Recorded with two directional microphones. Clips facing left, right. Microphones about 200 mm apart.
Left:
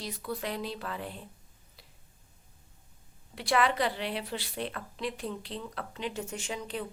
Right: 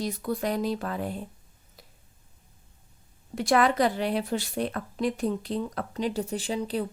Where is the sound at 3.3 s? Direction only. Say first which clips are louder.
Right 5 dB; 45° right (ahead or behind).